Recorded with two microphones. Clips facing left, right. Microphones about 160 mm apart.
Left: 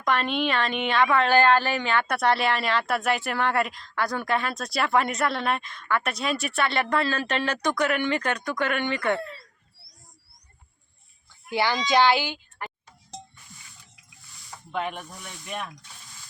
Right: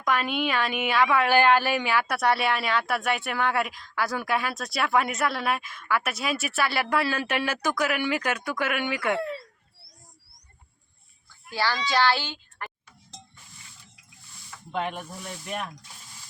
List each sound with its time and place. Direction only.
0.0 s a woman's voice: 5° right (ahead or behind)
11.4 s a child's voice: 20° left (ahead or behind)
14.7 s a woman's voice: centre (ahead or behind)